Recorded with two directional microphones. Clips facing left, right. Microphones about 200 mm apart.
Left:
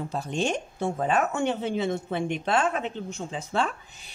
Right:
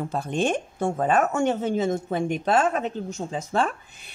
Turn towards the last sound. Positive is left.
turn(degrees=-55)  # may be behind; listen again after turning